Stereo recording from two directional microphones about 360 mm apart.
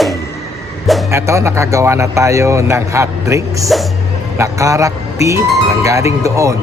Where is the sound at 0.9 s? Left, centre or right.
Centre.